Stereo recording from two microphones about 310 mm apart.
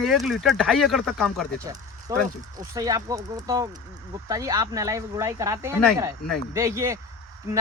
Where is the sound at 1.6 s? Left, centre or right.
Centre.